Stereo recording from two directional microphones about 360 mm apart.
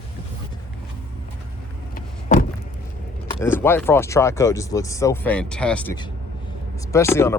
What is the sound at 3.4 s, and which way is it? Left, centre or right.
Speech, centre.